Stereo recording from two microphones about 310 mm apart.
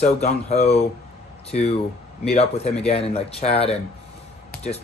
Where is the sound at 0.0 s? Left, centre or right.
Left.